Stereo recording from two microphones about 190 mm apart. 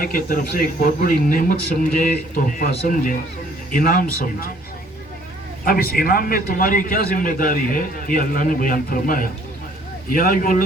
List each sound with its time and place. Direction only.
0.0 s a man's voice: 50° left (ahead or behind)
5.6 s a man's voice: 50° left (ahead or behind)